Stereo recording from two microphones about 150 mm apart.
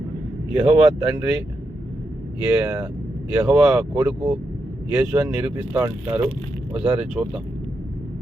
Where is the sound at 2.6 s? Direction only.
15° right (ahead or behind).